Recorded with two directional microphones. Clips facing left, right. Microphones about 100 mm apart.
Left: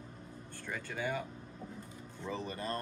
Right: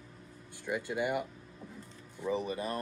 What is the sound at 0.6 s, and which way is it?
Speech, 15° right (ahead or behind).